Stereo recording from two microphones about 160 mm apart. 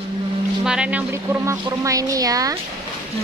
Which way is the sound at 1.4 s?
20° right (ahead or behind).